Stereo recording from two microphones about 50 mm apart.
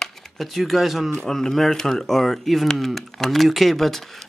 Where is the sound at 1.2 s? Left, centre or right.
Centre.